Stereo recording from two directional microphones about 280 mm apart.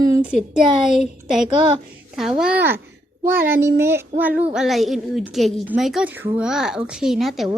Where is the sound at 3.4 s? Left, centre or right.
Right.